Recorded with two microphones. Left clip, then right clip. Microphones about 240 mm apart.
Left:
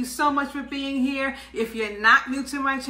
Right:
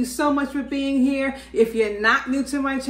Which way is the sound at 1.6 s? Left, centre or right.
Right.